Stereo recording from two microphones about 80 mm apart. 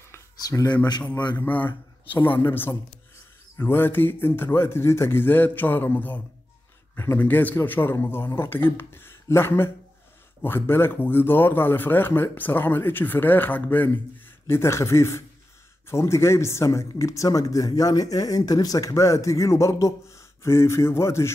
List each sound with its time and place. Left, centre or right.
0.4 s speech: left
1.4 s speech: left